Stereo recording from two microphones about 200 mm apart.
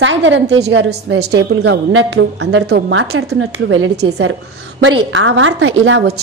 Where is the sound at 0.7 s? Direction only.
55° right (ahead or behind).